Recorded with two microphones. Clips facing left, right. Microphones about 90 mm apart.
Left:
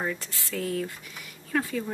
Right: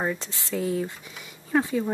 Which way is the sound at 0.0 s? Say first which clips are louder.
Right 3 dB; 20° right (ahead or behind).